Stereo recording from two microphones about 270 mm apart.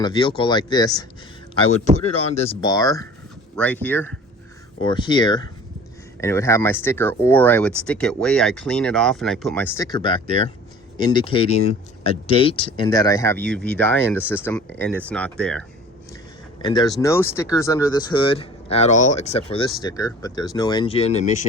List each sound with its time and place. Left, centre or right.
0.0 s speech: centre
16.6 s speech: centre